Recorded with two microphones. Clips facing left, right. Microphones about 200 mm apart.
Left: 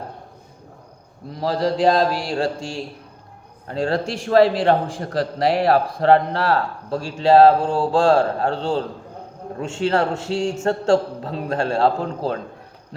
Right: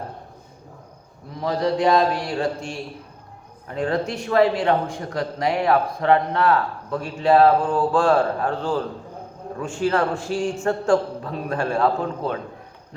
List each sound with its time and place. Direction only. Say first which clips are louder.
1.4 s a man's voice: left 1 dB; 30° left (ahead or behind)